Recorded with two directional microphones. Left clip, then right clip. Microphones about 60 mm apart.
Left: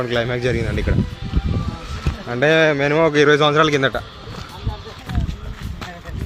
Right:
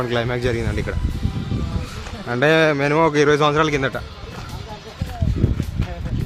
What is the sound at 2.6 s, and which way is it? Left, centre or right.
Speech, right.